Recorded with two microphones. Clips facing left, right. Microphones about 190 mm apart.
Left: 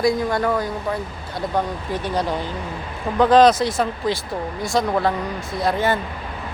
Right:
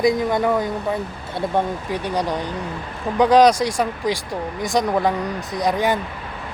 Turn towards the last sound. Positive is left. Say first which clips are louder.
# right 1 dB
turn(degrees=-15)  # may be behind; listen again after turning